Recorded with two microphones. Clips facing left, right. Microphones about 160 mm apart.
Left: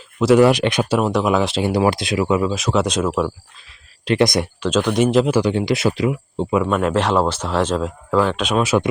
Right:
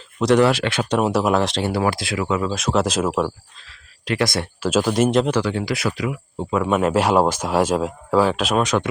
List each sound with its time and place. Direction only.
0.2 s speech: 5° left (ahead or behind)
0.4 s speech: 15° left (ahead or behind)
0.9 s speech: 5° right (ahead or behind)
1.6 s speech: 15° left (ahead or behind)
2.5 s speech: centre (ahead or behind)
4.0 s speech: 20° left (ahead or behind)
4.6 s speech: 5° right (ahead or behind)
5.4 s speech: 20° left (ahead or behind)
6.7 s speech: 5° right (ahead or behind)